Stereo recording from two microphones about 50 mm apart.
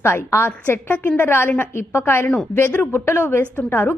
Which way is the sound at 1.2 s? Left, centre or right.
Left.